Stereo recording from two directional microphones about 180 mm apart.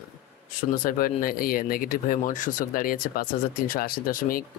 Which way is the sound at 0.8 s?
50° left (ahead or behind).